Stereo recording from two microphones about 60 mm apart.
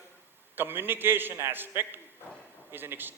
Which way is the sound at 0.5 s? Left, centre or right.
Right.